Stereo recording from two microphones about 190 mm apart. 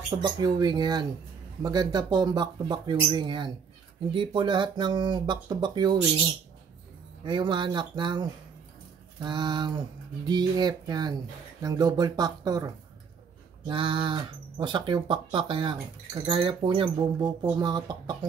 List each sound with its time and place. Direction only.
0.1 s speech: 20° right (ahead or behind)
7.2 s speech: 25° right (ahead or behind)